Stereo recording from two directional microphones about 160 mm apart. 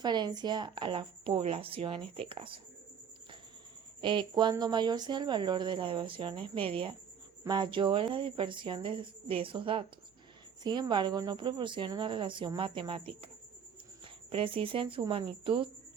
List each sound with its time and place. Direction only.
0.0 s a woman's voice: 25° right (ahead or behind)
4.0 s a woman's voice: 30° right (ahead or behind)